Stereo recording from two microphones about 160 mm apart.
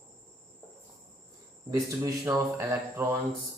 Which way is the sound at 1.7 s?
20° right (ahead or behind).